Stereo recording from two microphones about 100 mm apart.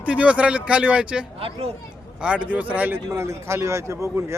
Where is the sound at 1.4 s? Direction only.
70° right (ahead or behind).